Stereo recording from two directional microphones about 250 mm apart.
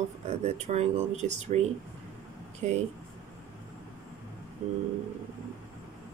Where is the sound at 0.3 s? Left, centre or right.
Right.